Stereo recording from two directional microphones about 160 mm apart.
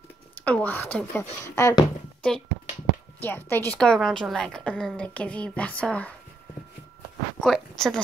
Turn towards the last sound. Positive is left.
turn(degrees=5)  # may be behind; listen again after turning